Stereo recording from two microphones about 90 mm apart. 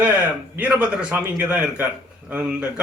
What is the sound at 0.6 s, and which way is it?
A man's voice, 15° right (ahead or behind).